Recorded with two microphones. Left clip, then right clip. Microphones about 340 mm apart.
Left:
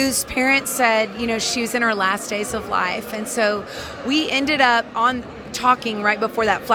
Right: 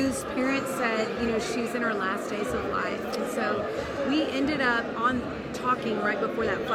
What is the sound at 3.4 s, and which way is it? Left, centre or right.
A woman's voice, left.